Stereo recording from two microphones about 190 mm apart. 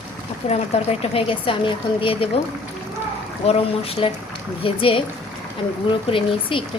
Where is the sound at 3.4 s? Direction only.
30° left (ahead or behind).